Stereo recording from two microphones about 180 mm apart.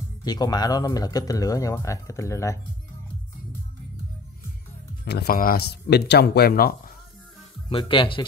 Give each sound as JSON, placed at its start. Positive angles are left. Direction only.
{"t": 0.2, "sound": "speech", "side_deg": 20}
{"t": 5.0, "sound": "speech", "side_deg": 60}
{"t": 7.7, "sound": "speech", "side_deg": 30}